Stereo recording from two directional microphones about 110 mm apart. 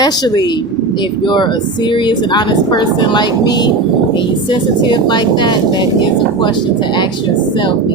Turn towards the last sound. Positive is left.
turn(degrees=45)  # may be behind; listen again after turning